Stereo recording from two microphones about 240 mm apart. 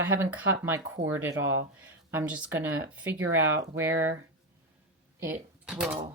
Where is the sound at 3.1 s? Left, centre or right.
Right.